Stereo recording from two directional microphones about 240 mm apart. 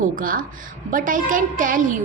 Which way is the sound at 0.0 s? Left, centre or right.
Right.